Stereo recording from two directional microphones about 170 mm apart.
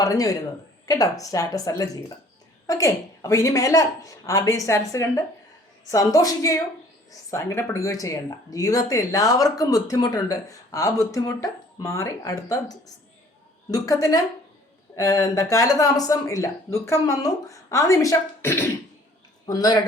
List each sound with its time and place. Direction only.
0.0 s speech: 20° left (ahead or behind)